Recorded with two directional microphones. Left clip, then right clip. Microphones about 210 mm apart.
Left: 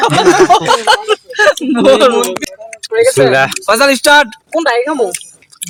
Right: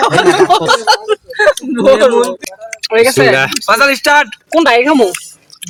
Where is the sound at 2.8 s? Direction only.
35° right (ahead or behind).